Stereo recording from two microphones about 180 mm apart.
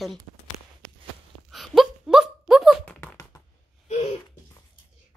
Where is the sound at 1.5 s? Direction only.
Centre (ahead or behind).